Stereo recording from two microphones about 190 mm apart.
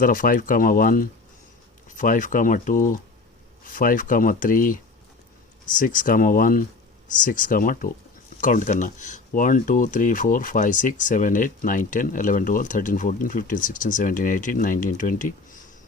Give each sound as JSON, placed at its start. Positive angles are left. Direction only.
{"t": 0.0, "sound": "speech", "side_deg": 45}